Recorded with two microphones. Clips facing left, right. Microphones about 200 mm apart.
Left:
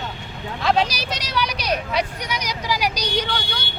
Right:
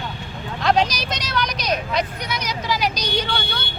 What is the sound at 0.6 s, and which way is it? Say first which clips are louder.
A woman's voice: right 1 dB; 5° left (ahead or behind).